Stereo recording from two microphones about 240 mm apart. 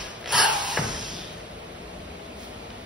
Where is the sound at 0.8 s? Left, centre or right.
Centre.